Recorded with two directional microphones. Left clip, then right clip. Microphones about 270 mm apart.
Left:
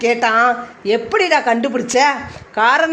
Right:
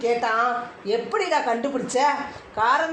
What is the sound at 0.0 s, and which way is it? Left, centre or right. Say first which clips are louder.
A woman's voice: left 8 dB; left.